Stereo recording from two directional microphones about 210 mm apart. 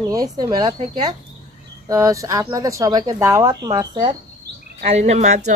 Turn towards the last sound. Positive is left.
turn(degrees=-35)  # may be behind; listen again after turning